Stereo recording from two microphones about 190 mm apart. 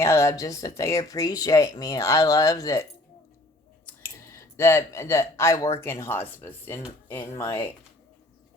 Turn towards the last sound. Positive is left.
turn(degrees=15)  # may be behind; listen again after turning